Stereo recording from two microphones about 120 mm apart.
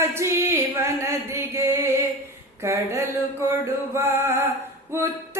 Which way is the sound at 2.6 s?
25° right (ahead or behind).